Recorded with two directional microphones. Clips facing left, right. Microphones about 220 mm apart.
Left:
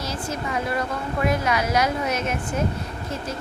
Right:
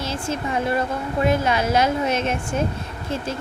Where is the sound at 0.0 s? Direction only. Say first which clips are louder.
Right 3 dB; 25° right (ahead or behind).